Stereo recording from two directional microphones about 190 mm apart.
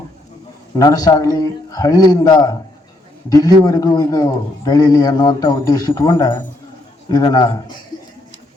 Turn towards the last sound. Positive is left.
turn(degrees=20)  # may be behind; listen again after turning